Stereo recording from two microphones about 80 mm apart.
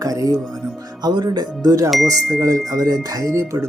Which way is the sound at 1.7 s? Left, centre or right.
Right.